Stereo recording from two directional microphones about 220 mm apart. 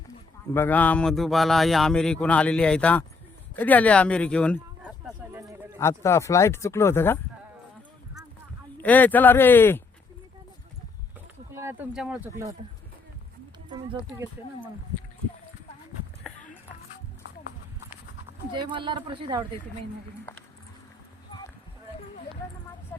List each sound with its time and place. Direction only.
0.5 s speech: 10° left (ahead or behind)
5.0 s a sound: 15° right (ahead or behind)
5.8 s speech: 10° left (ahead or behind)
8.8 s speech: 5° left (ahead or behind)
11.5 s speech: 10° right (ahead or behind)
18.5 s speech: 20° right (ahead or behind)